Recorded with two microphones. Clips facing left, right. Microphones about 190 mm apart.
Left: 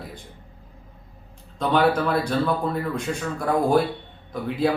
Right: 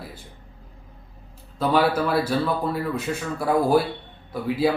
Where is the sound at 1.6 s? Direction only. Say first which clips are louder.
Even; 5° right (ahead or behind).